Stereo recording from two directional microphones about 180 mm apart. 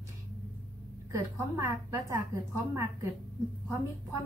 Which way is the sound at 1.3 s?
15° right (ahead or behind).